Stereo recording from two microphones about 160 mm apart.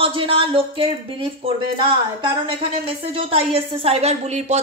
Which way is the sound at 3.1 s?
35° right (ahead or behind).